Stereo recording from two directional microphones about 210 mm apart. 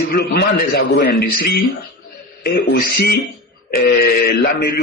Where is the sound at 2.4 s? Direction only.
50° left (ahead or behind).